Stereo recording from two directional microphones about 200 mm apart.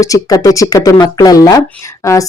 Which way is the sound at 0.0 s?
15° left (ahead or behind).